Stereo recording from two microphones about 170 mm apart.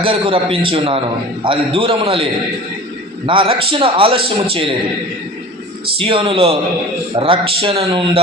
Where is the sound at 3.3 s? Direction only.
30° right (ahead or behind).